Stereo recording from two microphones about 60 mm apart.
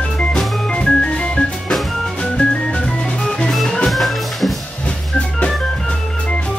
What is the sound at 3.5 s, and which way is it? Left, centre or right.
Music, centre.